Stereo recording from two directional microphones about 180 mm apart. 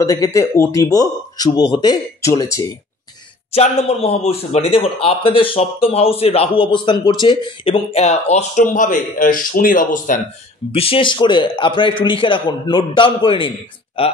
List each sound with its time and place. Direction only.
0.0 s a man's voice: 15° left (ahead or behind)
3.5 s speech: 35° left (ahead or behind)
10.7 s a man's voice: 30° left (ahead or behind)